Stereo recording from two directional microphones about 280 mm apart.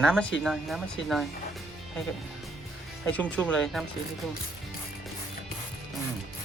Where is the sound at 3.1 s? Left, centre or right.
Centre.